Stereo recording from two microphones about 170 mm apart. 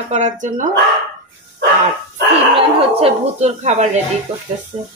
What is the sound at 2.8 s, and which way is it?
Speech, 35° right (ahead or behind).